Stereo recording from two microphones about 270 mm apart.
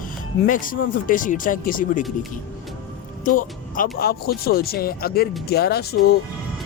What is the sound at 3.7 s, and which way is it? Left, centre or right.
Speech, left.